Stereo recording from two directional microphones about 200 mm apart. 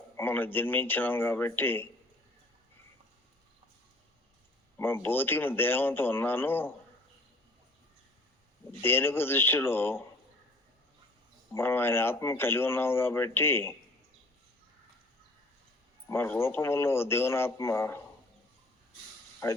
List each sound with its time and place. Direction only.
0.2 s a man's voice: 10° left (ahead or behind)
4.8 s a man's voice: 10° left (ahead or behind)
8.8 s a man's voice: 10° left (ahead or behind)
11.5 s a man's voice: 10° left (ahead or behind)
16.0 s a man's voice: 10° left (ahead or behind)
19.4 s a man's voice: 15° left (ahead or behind)